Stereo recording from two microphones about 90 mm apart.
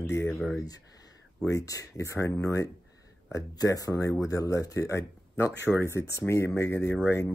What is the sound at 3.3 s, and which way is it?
Speech, 40° left (ahead or behind).